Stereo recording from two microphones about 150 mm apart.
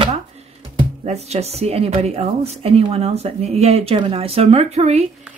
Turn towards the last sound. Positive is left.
turn(degrees=-45)  # may be behind; listen again after turning